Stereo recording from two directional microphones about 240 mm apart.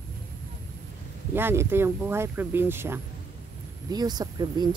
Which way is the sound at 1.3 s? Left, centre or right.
Centre.